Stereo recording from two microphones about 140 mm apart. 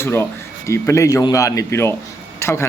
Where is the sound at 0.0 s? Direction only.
15° left (ahead or behind).